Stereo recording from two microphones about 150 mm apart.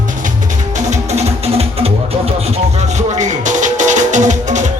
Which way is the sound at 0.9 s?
45° right (ahead or behind).